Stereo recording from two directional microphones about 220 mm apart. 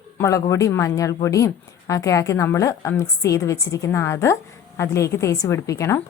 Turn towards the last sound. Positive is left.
turn(degrees=15)  # may be behind; listen again after turning